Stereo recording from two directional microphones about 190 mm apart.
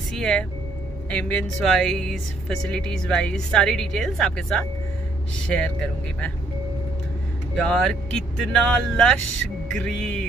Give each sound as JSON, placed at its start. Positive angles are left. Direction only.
{"t": 0.1, "sound": "speech", "side_deg": 5}
{"t": 7.5, "sound": "speech", "side_deg": 5}